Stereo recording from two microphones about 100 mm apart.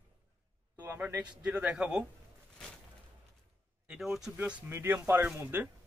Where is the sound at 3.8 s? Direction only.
5° right (ahead or behind).